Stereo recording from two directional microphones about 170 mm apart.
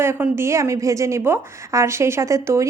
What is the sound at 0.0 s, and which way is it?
A woman's voice, 15° right (ahead or behind).